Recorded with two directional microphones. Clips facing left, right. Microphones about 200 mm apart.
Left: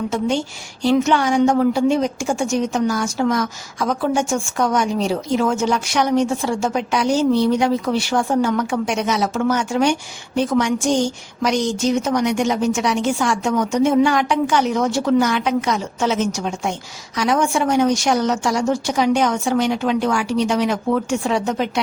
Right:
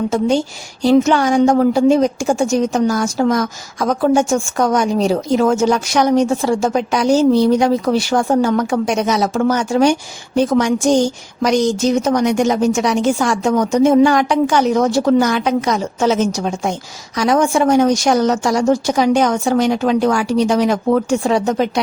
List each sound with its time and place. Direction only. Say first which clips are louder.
0.1 s a woman's voice: right 5 dB; 40° right (ahead or behind)